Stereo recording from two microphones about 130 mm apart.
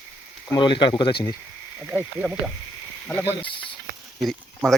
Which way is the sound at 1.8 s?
15° right (ahead or behind).